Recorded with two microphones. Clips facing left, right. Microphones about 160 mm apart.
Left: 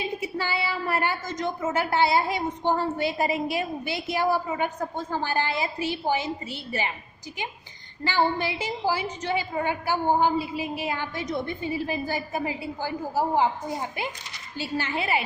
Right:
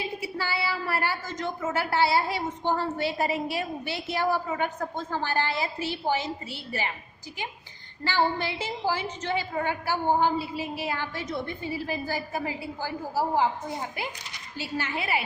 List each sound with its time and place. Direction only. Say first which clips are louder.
0.0 s a woman's voice: left 3 dB; 20° left (ahead or behind)
8.0 s a woman's voice: left 2 dB; 15° left (ahead or behind)
14.6 s a woman's voice: left 3 dB; 30° left (ahead or behind)